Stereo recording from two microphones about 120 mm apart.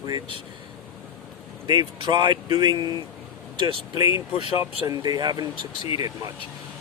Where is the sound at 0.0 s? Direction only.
40° right (ahead or behind).